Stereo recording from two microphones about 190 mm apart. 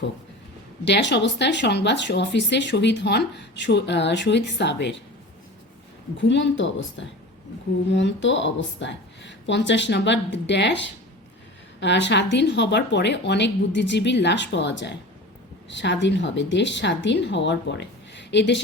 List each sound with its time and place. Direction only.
0.9 s speech: 65° left (ahead or behind)
6.1 s speech: 70° left (ahead or behind)